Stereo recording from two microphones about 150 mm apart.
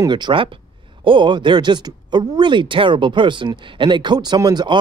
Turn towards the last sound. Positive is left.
turn(degrees=-30)  # may be behind; listen again after turning